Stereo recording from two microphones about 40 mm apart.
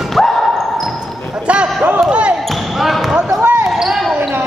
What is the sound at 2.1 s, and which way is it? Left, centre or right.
Basketball bounce, right.